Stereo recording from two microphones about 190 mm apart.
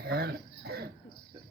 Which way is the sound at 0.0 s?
55° right (ahead or behind).